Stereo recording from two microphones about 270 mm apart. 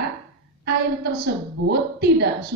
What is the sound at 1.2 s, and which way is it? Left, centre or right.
Speech, right.